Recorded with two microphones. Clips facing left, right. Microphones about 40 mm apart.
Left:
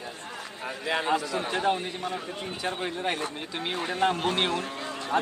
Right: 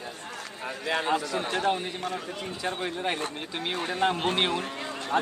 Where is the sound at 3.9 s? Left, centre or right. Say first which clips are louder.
Left 1 dB; right.